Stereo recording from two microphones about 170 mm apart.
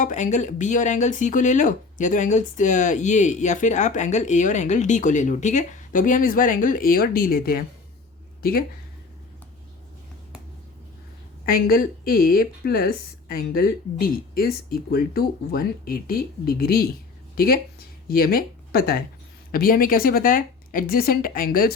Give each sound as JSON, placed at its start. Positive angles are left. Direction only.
{"t": 0.0, "sound": "speech", "side_deg": 45}
{"t": 11.4, "sound": "speech", "side_deg": 60}